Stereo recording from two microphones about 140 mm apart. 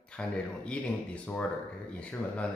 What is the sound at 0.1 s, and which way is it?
Speech, 5° left (ahead or behind).